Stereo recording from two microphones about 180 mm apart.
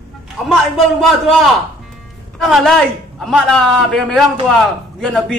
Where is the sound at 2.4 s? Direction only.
Centre (ahead or behind).